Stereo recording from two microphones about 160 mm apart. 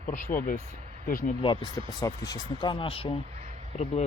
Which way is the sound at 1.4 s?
30° left (ahead or behind).